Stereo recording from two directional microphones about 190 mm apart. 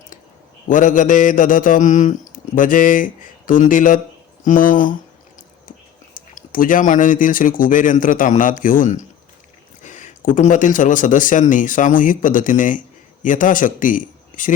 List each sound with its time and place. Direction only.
0.7 s mantra: 45° left (ahead or behind)
6.1 s mantra: 45° left (ahead or behind)